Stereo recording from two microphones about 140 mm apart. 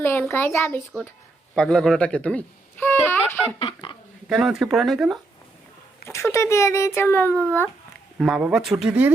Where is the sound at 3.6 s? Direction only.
40° left (ahead or behind).